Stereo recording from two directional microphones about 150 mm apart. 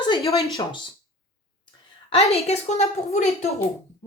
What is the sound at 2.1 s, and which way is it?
A woman's voice, 45° left (ahead or behind).